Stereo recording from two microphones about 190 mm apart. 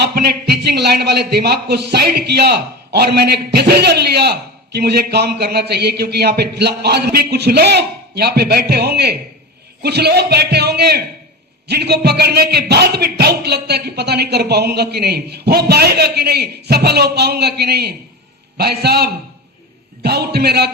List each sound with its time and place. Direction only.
0.0 s a man's voice: 55° right (ahead or behind)